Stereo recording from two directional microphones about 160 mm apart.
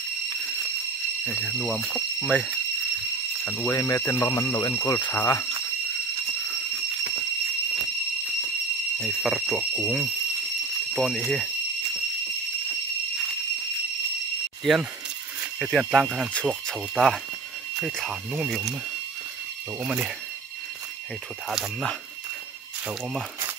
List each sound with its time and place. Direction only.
1.2 s speech: centre (ahead or behind)
9.0 s speech: centre (ahead or behind)
14.6 s speech: centre (ahead or behind)
19.8 s speech: 5° right (ahead or behind)
21.5 s speech: centre (ahead or behind)